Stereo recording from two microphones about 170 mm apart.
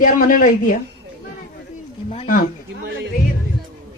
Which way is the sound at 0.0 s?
50° left (ahead or behind).